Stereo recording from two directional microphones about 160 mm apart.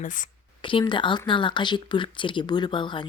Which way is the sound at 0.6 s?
30° left (ahead or behind).